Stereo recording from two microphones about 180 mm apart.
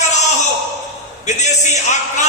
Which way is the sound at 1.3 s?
40° left (ahead or behind).